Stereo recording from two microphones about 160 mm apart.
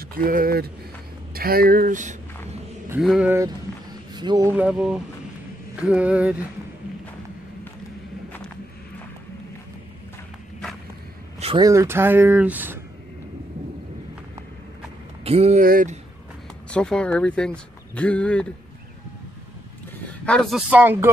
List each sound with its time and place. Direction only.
0.1 s speech: 60° right (ahead or behind)
3.0 s speech: centre (ahead or behind)
3.3 s speech: 20° right (ahead or behind)
4.5 s speech: 10° right (ahead or behind)
11.5 s speech: 20° right (ahead or behind)
15.2 s speech: 40° right (ahead or behind)
15.6 s speech: 65° right (ahead or behind)
16.7 s speech: 5° left (ahead or behind)
20.1 s a sound: 5° left (ahead or behind)
20.7 s speech: 15° right (ahead or behind)